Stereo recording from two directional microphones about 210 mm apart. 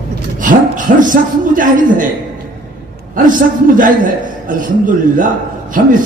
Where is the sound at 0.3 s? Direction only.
40° right (ahead or behind).